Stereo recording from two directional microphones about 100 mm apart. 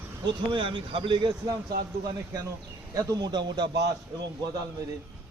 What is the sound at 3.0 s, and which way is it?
Speech, 40° right (ahead or behind).